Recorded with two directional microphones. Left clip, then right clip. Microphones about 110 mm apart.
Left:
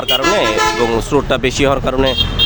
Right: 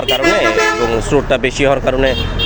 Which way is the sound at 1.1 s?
75° left (ahead or behind).